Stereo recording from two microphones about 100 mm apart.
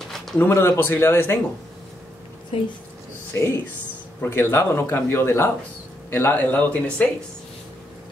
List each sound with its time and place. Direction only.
0.4 s a man's voice: 25° left (ahead or behind)
3.3 s a man's voice: 30° left (ahead or behind)